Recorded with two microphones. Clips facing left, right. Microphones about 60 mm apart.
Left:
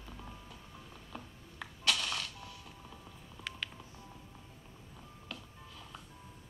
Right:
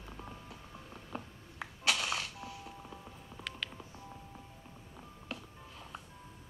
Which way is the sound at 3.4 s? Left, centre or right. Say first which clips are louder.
Even; centre.